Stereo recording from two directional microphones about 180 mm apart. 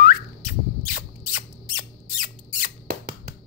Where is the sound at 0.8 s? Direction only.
50° left (ahead or behind).